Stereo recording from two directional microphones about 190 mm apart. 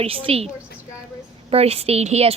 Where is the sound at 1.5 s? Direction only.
30° right (ahead or behind).